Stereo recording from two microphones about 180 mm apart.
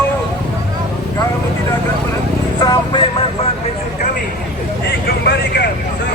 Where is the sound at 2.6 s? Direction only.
20° left (ahead or behind).